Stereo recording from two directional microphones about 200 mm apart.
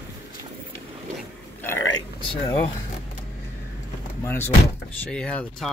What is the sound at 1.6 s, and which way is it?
Burping, 10° left (ahead or behind).